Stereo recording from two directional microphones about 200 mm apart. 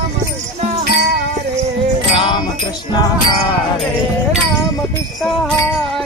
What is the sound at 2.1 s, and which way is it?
Music, 25° left (ahead or behind).